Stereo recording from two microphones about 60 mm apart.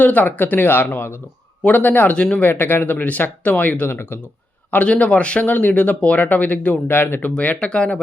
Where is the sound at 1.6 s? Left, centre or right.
Left.